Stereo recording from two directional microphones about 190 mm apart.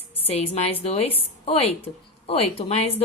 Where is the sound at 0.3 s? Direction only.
30° left (ahead or behind).